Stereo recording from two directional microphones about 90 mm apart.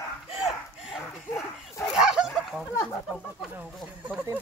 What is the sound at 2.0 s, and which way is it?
Dog, 5° right (ahead or behind).